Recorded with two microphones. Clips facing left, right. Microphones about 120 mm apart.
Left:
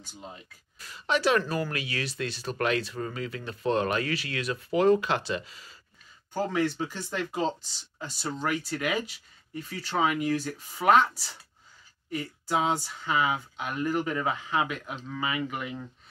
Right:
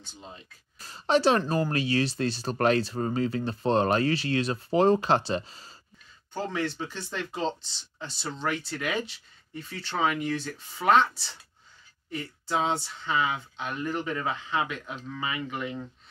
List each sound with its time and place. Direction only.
0.0 s speech: 10° left (ahead or behind)
0.7 s speech: 35° right (ahead or behind)
6.3 s speech: 10° left (ahead or behind)